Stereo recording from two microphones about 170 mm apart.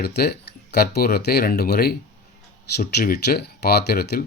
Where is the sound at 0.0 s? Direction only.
70° left (ahead or behind).